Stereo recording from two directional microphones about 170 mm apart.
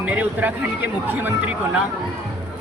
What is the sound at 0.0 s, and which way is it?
Speech, 10° right (ahead or behind).